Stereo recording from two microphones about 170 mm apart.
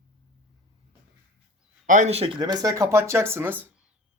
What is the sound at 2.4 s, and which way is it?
Speech, 20° right (ahead or behind).